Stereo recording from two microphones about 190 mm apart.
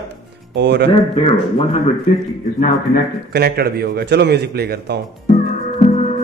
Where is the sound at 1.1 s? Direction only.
30° left (ahead or behind).